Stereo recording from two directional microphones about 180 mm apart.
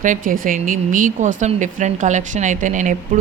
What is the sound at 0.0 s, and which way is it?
Speech, 45° right (ahead or behind).